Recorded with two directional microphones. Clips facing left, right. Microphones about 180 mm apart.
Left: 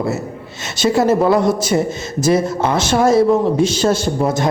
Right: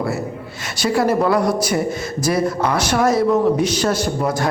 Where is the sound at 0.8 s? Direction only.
25° left (ahead or behind).